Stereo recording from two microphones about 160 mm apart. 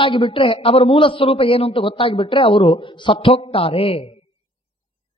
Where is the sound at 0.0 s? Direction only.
30° left (ahead or behind).